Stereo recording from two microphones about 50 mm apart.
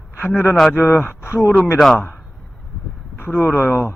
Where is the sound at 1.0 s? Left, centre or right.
Left.